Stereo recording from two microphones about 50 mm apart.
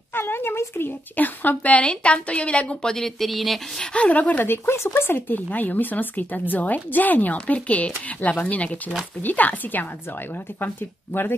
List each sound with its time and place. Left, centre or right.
0.1 s a sound: left
1.1 s a woman's voice: left
2.8 s speech: centre
3.8 s a woman's voice: left
4.5 s speech: left